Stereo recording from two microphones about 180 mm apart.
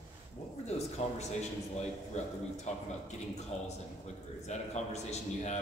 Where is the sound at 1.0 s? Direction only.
40° left (ahead or behind).